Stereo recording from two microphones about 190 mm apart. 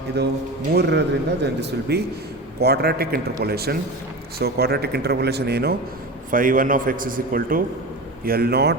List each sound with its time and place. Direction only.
0.2 s speech: 60° right (ahead or behind)
6.3 s a man's voice: 45° right (ahead or behind)